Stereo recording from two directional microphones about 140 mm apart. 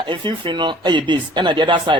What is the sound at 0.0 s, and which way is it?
Speech, 35° right (ahead or behind).